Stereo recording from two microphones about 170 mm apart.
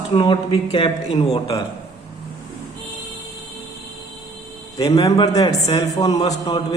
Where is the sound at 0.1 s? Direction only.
30° left (ahead or behind).